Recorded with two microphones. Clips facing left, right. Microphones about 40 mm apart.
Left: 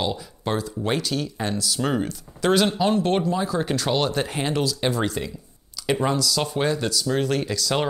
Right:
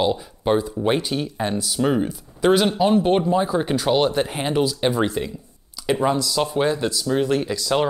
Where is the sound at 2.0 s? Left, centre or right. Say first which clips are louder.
Right 4 dB; centre.